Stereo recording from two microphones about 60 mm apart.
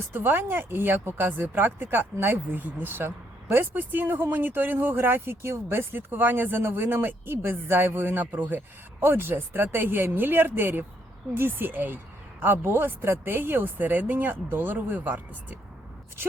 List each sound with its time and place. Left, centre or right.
0.1 s speech: right